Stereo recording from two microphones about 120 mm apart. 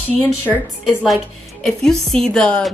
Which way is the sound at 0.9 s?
5° right (ahead or behind).